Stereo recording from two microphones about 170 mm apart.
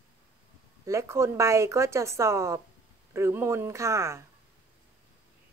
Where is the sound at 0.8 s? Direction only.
15° right (ahead or behind).